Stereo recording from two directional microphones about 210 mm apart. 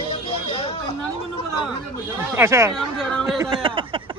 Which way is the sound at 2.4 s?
15° right (ahead or behind).